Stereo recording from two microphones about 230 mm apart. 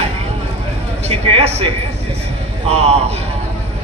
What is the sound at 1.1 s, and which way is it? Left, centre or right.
A man's voice, right.